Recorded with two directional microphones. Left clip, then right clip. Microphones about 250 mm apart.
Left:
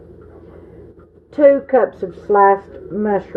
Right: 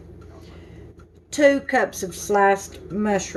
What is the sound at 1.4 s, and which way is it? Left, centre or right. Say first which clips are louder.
Speech: left 6 dB; right.